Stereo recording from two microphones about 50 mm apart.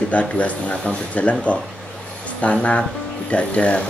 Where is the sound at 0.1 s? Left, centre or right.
Left.